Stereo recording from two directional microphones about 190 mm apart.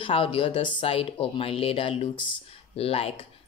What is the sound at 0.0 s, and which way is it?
Speech, 30° left (ahead or behind).